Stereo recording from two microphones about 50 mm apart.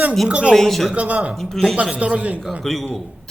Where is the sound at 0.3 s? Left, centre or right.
Right.